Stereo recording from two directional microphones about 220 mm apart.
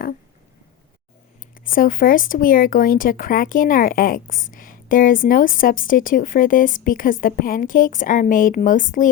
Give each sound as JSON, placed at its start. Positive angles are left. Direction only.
{"t": 1.5, "sound": "a woman's voice", "side_deg": 40}